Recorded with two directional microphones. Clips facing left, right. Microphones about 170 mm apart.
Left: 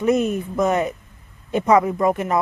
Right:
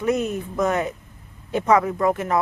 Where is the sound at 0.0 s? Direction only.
20° left (ahead or behind).